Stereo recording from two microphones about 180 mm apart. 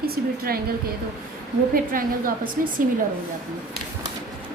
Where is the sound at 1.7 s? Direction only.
50° right (ahead or behind).